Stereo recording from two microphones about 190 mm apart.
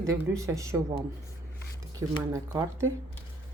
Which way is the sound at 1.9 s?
15° right (ahead or behind).